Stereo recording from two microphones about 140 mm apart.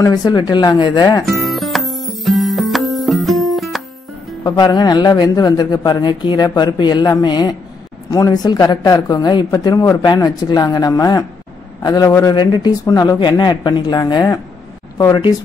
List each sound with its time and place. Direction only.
0.0 s speech: 30° left (ahead or behind)
1.2 s music: centre (ahead or behind)
4.4 s speech: 25° left (ahead or behind)